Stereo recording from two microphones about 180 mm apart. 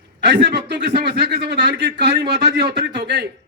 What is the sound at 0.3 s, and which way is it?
Speech, 70° right (ahead or behind).